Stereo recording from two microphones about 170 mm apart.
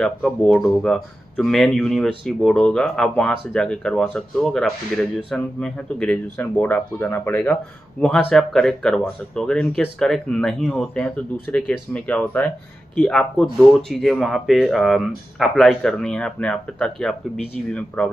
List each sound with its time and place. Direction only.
0.0 s speech: centre (ahead or behind)